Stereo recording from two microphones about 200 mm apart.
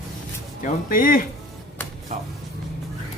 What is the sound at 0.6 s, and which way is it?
Speech, 45° left (ahead or behind).